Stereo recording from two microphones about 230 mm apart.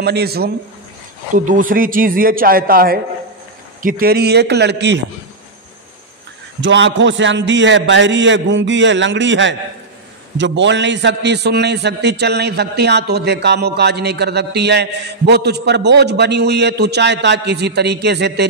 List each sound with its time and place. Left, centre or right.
0.0 s a man's voice: right
6.6 s a man's voice: right